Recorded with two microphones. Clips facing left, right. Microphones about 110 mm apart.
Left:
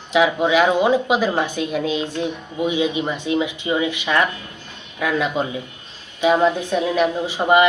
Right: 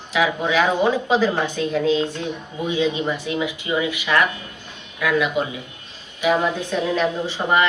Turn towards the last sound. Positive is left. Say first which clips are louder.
# left 4 dB
turn(degrees=15)  # may be behind; listen again after turning